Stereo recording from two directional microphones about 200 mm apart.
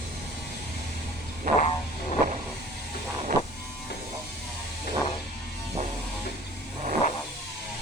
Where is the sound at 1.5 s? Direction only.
40° left (ahead or behind).